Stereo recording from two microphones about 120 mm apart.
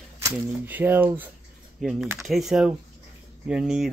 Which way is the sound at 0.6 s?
15° right (ahead or behind).